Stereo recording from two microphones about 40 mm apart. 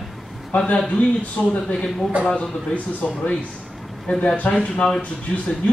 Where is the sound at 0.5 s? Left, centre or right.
Left.